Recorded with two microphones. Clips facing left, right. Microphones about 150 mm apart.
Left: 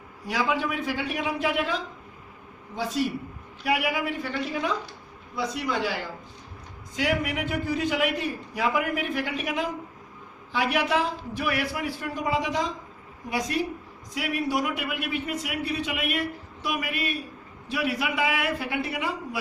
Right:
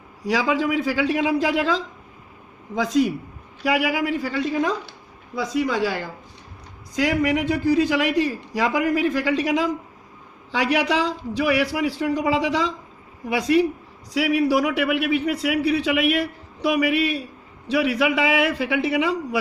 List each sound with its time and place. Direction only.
0.3 s a man's voice: 90° right
6.9 s a man's voice: 85° right
14.1 s a man's voice: 80° right